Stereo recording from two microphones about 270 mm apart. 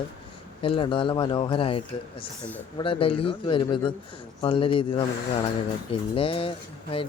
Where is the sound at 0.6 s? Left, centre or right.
Centre.